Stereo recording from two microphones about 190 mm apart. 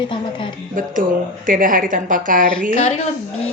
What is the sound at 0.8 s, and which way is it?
Speech, 45° right (ahead or behind).